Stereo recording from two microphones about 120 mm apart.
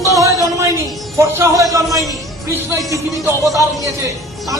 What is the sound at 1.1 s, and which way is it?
A man's voice, 20° right (ahead or behind).